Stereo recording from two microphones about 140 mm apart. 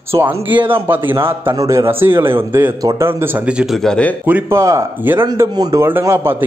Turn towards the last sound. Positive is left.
turn(degrees=-15)  # may be behind; listen again after turning